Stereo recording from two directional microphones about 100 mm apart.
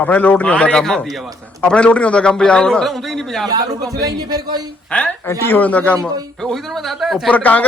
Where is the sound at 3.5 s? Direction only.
40° right (ahead or behind).